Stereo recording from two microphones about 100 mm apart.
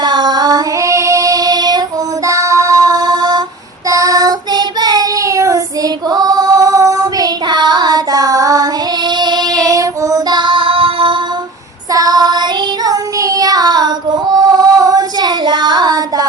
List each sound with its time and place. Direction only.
0.0 s child singing: 45° right (ahead or behind)
2.2 s music: 30° right (ahead or behind)
3.8 s child singing: 35° right (ahead or behind); by 11.2 s 60° right (ahead or behind)
11.9 s child singing: 40° right (ahead or behind)